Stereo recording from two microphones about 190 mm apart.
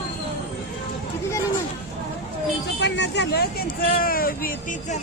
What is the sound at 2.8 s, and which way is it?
Speech, 65° left (ahead or behind).